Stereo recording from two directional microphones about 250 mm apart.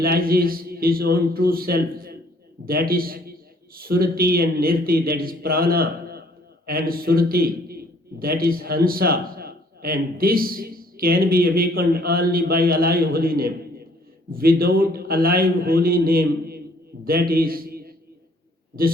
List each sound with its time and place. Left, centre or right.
0.0 s a man's voice: right